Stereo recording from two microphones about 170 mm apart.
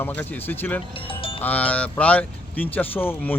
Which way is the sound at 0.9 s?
30° left (ahead or behind).